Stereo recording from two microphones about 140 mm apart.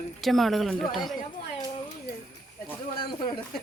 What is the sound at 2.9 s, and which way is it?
Snake, 35° left (ahead or behind).